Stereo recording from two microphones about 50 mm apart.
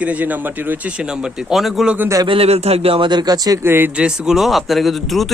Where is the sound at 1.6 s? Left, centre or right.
Centre.